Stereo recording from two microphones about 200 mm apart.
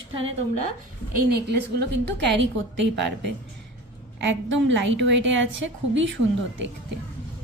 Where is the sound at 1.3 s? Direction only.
55° right (ahead or behind).